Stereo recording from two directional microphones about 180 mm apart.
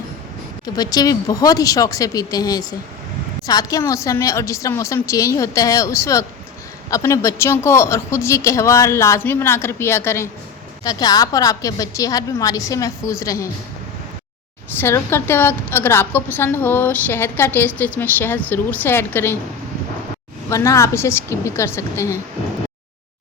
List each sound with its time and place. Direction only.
0.6 s a woman's voice: 20° left (ahead or behind)
14.8 s a woman's voice: 15° left (ahead or behind)
20.5 s a woman's voice: 15° left (ahead or behind)